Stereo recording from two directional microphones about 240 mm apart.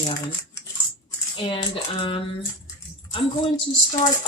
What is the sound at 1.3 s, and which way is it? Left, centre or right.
Speech, left.